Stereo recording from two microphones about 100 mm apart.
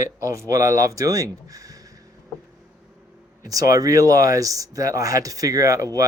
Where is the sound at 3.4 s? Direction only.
35° right (ahead or behind).